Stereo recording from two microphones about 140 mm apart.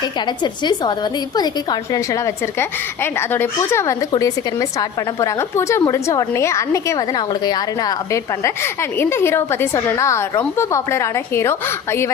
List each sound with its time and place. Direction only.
0.3 s a woman's voice: 30° left (ahead or behind)